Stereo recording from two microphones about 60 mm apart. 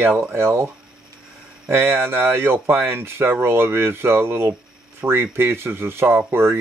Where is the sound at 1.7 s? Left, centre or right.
Right.